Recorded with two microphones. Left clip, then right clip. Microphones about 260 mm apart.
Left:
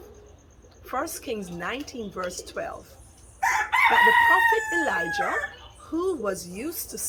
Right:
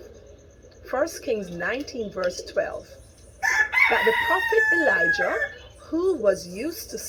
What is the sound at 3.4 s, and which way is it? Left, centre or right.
Chicken, left.